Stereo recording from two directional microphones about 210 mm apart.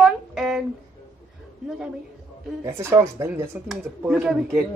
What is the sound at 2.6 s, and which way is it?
A woman's voice, 10° right (ahead or behind).